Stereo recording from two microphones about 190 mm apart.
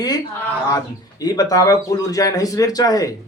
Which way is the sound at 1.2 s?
20° left (ahead or behind).